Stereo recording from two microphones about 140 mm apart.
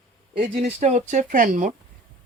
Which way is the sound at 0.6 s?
55° right (ahead or behind).